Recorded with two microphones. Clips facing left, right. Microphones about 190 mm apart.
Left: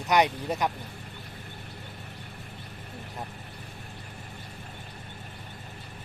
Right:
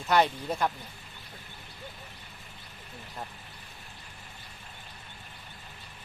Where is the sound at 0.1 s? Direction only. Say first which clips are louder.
Left 1 dB; 15° left (ahead or behind).